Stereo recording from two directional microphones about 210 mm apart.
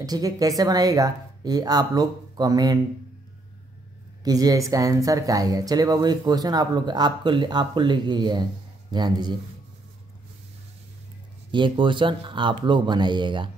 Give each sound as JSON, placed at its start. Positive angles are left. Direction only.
{"t": 0.0, "sound": "speech", "side_deg": -15}
{"t": 4.2, "sound": "speech", "side_deg": -15}
{"t": 11.5, "sound": "speech", "side_deg": -20}